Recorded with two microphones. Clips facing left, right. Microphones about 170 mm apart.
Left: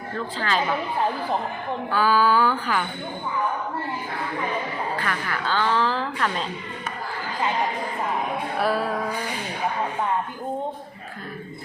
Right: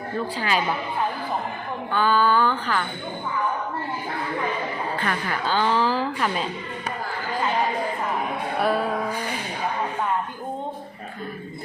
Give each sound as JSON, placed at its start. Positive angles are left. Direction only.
{"t": 0.2, "sound": "speech", "side_deg": -15}
{"t": 1.9, "sound": "a sound", "side_deg": 5}
{"t": 4.9, "sound": "speech", "side_deg": -20}
{"t": 8.5, "sound": "music", "side_deg": 0}